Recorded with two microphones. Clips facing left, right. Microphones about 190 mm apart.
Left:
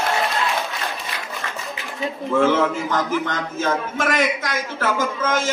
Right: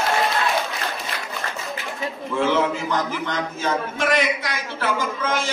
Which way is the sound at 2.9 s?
50° left (ahead or behind).